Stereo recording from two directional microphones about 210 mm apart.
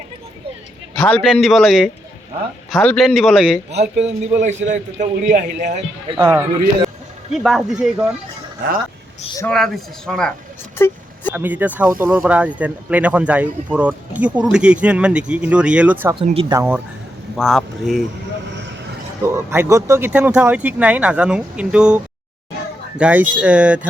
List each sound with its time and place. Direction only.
0.9 s speech: 5° left (ahead or behind)
4.0 s a man's voice: 35° right (ahead or behind)
6.2 s speech: 10° right (ahead or behind)
9.5 s speech: centre (ahead or behind)
10.8 s vehicle: 10° left (ahead or behind)
11.3 s speech: 10° right (ahead or behind)
16.1 s speech: 25° right (ahead or behind)
16.6 s speech: 10° right (ahead or behind)
17.3 s speech: centre (ahead or behind)
19.2 s speech: 10° right (ahead or behind)